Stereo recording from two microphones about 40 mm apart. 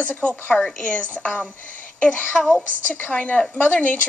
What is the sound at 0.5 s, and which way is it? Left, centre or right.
Speech, centre.